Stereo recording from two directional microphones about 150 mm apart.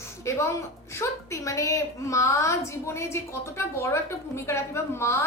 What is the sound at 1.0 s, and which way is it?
A woman's voice, 20° left (ahead or behind).